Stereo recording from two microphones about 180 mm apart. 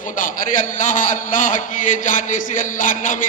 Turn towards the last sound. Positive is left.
turn(degrees=45)  # may be behind; listen again after turning